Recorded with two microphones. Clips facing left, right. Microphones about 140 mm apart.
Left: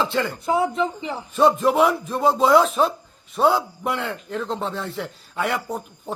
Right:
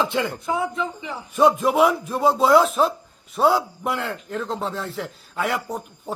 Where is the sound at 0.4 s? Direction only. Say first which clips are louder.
Left 4 dB; 20° left (ahead or behind).